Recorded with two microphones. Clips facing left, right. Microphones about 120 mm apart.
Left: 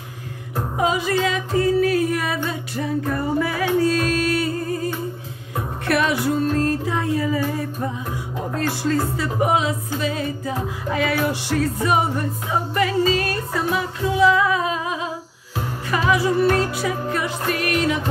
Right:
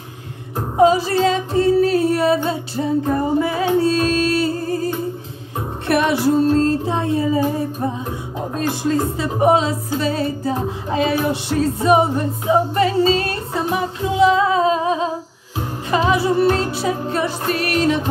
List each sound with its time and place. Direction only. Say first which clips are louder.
0.7 s singing: right 7 dB; 35° right (ahead or behind)
5.9 s music: right 4 dB; 25° right (ahead or behind)
13.7 s humming: right 4 dB; 20° right (ahead or behind)
15.9 s music: right 3 dB; 25° right (ahead or behind)